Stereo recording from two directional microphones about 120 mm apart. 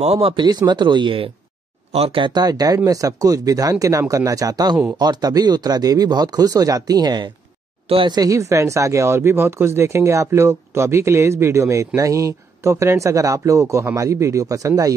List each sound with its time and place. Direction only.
0.0 s speech: 55° right (ahead or behind)
1.9 s speech: 55° right (ahead or behind)
2.2 s speech: 35° right (ahead or behind)
8.2 s speech: 25° right (ahead or behind)